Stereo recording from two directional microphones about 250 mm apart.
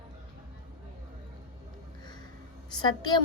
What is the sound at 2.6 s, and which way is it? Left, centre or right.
Speech, centre.